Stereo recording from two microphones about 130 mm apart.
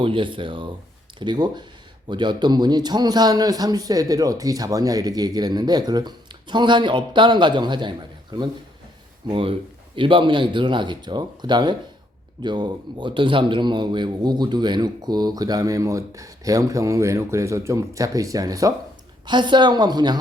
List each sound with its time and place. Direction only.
0.0 s a man's voice: 40° right (ahead or behind)